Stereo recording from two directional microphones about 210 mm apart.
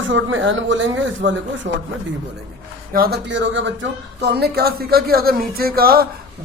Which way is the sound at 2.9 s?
45° right (ahead or behind).